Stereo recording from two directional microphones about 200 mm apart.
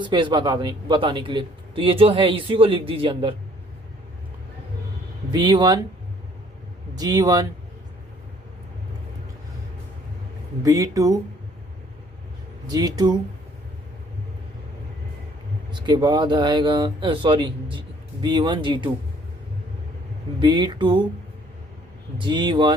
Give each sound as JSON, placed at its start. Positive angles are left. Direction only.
{"t": 0.0, "sound": "a man's voice", "side_deg": -25}
{"t": 5.3, "sound": "a man's voice", "side_deg": -20}
{"t": 7.0, "sound": "a man's voice", "side_deg": -20}
{"t": 10.6, "sound": "speech", "side_deg": -15}
{"t": 12.6, "sound": "a man's voice", "side_deg": -20}
{"t": 15.9, "sound": "a man's voice", "side_deg": -20}
{"t": 20.4, "sound": "a man's voice", "side_deg": -25}
{"t": 22.2, "sound": "a man's voice", "side_deg": -25}